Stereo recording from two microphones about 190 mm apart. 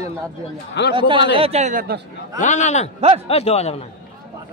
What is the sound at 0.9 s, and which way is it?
A man's voice, 25° right (ahead or behind).